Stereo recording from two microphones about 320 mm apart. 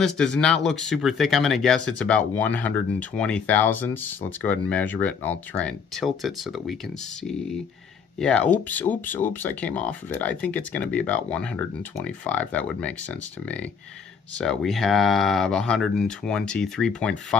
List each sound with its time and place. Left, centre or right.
0.0 s speech: centre
8.2 s speech: centre